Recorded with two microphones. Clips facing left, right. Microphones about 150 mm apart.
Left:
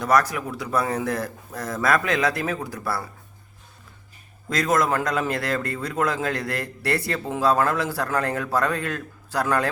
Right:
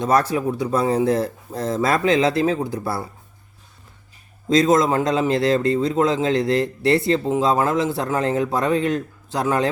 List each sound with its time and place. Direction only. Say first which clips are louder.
0.0 s a man's voice: right 3 dB; 25° right (ahead or behind)
4.4 s a man's voice: right 6 dB; 25° right (ahead or behind)